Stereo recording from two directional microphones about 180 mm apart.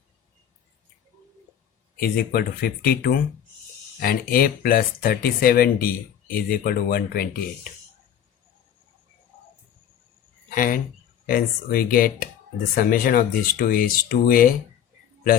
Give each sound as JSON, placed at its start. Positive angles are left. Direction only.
{"t": 2.0, "sound": "speech", "side_deg": 55}
{"t": 10.5, "sound": "speech", "side_deg": 50}